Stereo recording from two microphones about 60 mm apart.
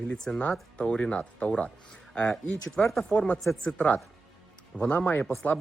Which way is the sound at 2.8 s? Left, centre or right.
Left.